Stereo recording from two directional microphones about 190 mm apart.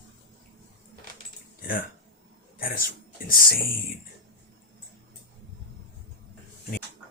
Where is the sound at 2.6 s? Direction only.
50° left (ahead or behind).